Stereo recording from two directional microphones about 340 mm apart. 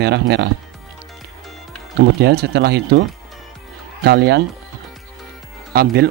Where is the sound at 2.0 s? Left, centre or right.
Right.